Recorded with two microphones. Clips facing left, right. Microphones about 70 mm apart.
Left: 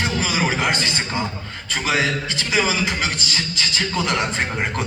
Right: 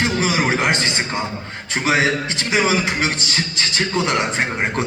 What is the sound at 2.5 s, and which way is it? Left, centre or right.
A man's voice, right.